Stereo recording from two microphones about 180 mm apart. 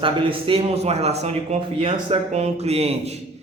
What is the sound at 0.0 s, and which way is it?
A man's voice, 30° right (ahead or behind).